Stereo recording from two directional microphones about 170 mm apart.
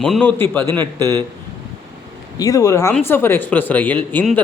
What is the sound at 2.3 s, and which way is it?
A man's voice, 20° left (ahead or behind).